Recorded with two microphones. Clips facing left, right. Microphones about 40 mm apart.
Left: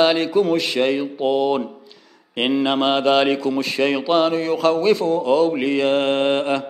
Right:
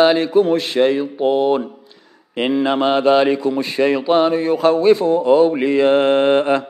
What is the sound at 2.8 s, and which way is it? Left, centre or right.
Mantra, centre.